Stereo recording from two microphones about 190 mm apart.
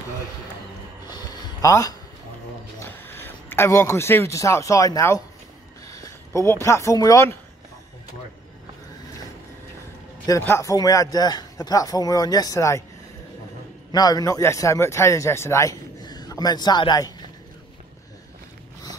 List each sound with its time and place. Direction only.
1.1 s a sound: 15° left (ahead or behind)
2.8 s a man's voice: 15° left (ahead or behind)
10.2 s speech: 15° left (ahead or behind)
13.9 s a man's voice: 20° left (ahead or behind)